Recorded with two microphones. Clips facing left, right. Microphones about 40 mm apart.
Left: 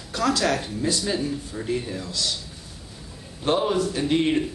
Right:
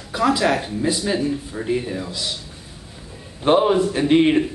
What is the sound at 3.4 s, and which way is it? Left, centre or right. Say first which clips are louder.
Speech: right 6 dB; right.